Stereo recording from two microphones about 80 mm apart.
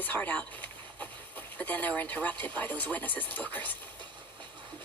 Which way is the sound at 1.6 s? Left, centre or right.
Left.